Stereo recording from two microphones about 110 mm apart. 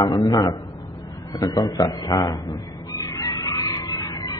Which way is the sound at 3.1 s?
30° left (ahead or behind).